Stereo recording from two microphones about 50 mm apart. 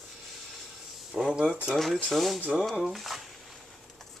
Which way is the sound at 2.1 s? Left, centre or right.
Centre.